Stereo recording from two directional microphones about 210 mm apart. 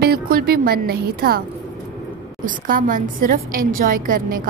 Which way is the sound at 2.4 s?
40° right (ahead or behind).